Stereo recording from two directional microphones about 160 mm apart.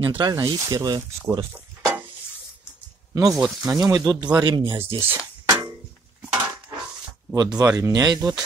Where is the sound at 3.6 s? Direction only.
20° right (ahead or behind).